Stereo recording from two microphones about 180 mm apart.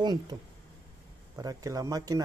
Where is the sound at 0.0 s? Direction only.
25° right (ahead or behind).